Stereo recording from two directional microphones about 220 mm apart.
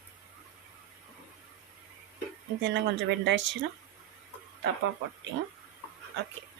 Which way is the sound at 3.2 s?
55° right (ahead or behind).